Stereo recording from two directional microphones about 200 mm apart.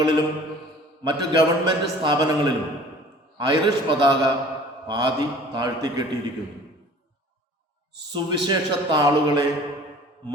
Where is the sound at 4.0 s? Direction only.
20° right (ahead or behind).